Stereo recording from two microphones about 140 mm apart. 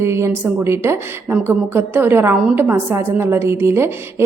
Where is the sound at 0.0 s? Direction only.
20° right (ahead or behind).